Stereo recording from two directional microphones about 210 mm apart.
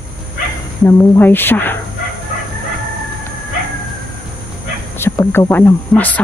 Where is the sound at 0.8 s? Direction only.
10° left (ahead or behind).